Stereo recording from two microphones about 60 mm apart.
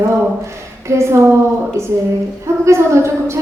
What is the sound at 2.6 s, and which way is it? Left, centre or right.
Speech, right.